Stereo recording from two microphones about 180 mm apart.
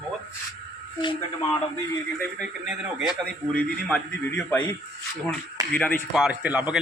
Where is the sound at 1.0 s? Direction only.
25° left (ahead or behind).